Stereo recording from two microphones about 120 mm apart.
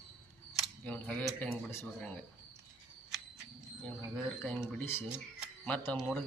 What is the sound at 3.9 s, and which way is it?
Speech, 10° left (ahead or behind).